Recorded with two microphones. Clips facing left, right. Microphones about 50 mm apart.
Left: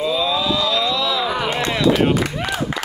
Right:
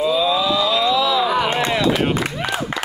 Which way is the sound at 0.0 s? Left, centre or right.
Centre.